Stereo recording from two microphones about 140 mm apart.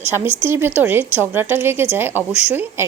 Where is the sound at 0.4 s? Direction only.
15° right (ahead or behind).